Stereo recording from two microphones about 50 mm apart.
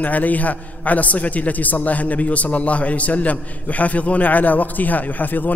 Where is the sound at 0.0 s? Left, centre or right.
Left.